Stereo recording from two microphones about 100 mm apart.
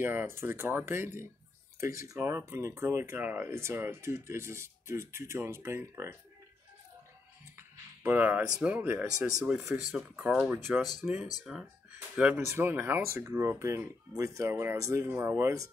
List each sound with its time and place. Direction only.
0.0 s speech: 20° right (ahead or behind)
7.5 s music: 20° right (ahead or behind)
8.5 s speech: 10° right (ahead or behind)
11.4 s speech: 5° right (ahead or behind)
12.2 s speech: 15° right (ahead or behind)
12.4 s speech: 25° right (ahead or behind)